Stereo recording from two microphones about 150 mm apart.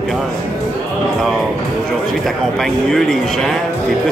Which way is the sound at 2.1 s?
Centre (ahead or behind).